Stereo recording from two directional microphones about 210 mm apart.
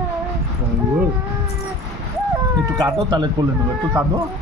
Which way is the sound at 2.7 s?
20° right (ahead or behind).